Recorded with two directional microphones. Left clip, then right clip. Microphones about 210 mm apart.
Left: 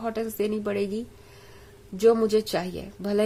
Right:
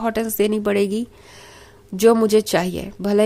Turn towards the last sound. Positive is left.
turn(degrees=-30)  # may be behind; listen again after turning